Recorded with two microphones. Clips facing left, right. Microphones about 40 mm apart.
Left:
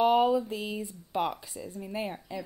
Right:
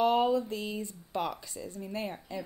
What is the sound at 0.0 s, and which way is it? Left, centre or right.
Speech, centre.